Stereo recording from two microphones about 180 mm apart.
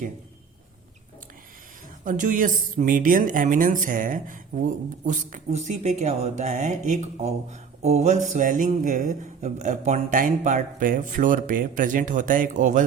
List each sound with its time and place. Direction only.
2.0 s speech: 45° right (ahead or behind)